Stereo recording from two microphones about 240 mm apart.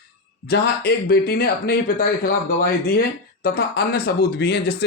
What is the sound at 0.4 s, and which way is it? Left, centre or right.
Speech, left.